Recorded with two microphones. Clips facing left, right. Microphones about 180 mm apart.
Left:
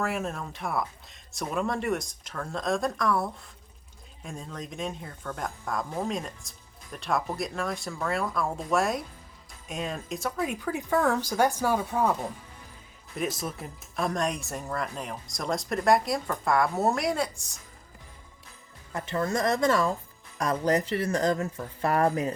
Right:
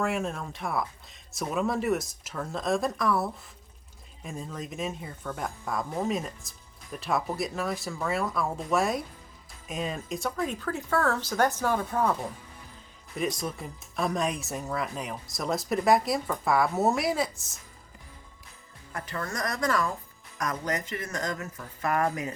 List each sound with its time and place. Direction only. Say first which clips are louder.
0.0 s speech: right 1 dB; centre (ahead or behind)
13.1 s speech: right 1 dB; centre (ahead or behind)
18.9 s speech: left 6 dB; 25° left (ahead or behind)